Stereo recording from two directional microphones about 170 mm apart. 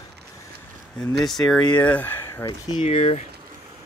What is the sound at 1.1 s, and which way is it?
Speech, centre (ahead or behind).